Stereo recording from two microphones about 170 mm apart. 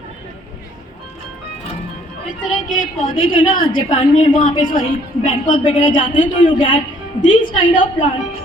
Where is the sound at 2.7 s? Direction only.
55° left (ahead or behind).